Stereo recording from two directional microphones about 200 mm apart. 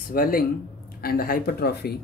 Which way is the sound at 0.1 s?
45° left (ahead or behind).